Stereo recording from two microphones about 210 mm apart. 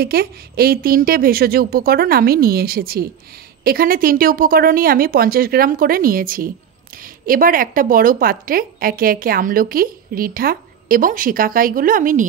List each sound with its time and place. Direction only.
0.0 s a woman's voice: 45° right (ahead or behind)